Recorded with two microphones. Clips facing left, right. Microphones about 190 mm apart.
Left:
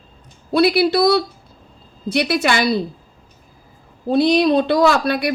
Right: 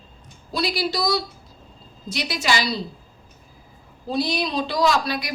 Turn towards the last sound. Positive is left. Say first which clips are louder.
# left 6 dB
turn(degrees=55)  # may be behind; listen again after turning